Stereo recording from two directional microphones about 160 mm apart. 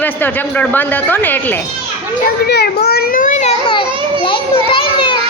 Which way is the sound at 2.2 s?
85° left.